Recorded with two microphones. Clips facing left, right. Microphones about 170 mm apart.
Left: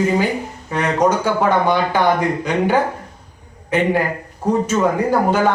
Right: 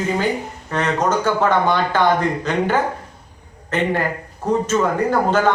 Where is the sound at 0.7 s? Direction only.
10° left (ahead or behind).